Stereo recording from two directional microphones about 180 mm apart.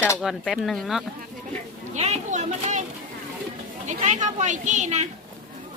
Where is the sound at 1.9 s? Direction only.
40° right (ahead or behind).